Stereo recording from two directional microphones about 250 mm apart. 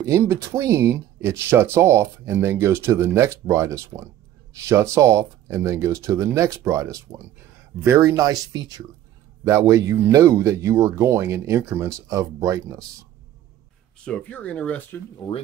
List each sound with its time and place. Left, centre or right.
0.0 s speech: centre
14.0 s speech: centre
15.1 s speech: centre